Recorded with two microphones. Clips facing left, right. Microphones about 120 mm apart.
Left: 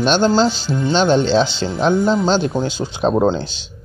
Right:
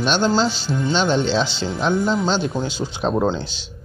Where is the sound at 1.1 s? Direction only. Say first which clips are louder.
Left 5 dB; 40° left (ahead or behind).